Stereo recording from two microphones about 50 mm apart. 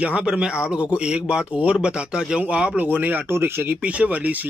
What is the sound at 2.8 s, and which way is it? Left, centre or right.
Speech, right.